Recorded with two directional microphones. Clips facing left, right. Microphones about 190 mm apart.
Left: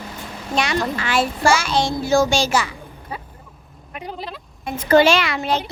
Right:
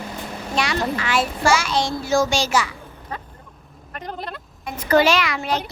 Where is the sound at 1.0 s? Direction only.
30° left (ahead or behind).